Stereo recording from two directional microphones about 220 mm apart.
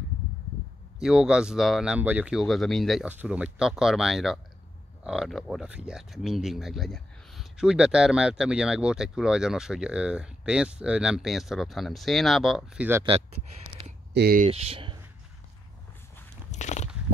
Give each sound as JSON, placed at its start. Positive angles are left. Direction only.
{"t": 0.9, "sound": "speech", "side_deg": -5}
{"t": 14.1, "sound": "speech", "side_deg": -45}
{"t": 14.5, "sound": "speech", "side_deg": -25}
{"t": 16.5, "sound": "a sound", "side_deg": 30}